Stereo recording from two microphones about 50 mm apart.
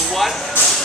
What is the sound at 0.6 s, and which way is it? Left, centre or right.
Music, left.